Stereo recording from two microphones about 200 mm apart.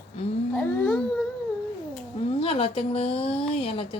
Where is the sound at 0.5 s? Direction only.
10° left (ahead or behind).